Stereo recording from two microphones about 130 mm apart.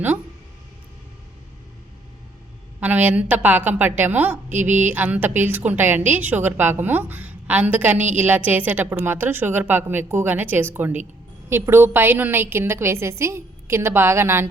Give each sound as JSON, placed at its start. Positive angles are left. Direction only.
{"t": 2.8, "sound": "a woman's voice", "side_deg": -10}